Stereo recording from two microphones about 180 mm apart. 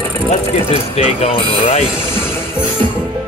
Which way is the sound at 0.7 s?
35° left (ahead or behind).